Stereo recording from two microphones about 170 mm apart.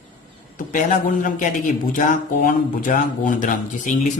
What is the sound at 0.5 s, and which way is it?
A man's voice, 50° left (ahead or behind).